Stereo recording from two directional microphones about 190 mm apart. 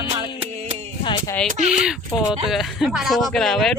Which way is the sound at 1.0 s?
25° left (ahead or behind).